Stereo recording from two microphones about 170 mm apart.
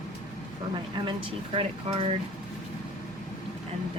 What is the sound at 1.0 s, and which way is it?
Speech, 30° right (ahead or behind).